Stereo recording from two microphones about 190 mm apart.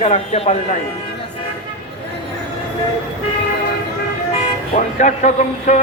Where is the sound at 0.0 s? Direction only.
40° left (ahead or behind).